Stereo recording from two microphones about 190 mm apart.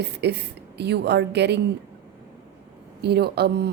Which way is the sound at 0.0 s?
60° right (ahead or behind).